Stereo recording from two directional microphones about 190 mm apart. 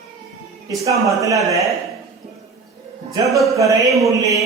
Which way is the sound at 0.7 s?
15° right (ahead or behind).